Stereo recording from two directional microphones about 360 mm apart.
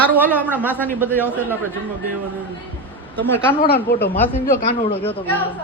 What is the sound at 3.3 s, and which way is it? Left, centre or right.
Speech, centre.